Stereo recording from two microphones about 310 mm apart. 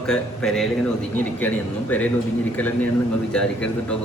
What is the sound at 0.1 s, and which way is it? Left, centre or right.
A man's voice, centre.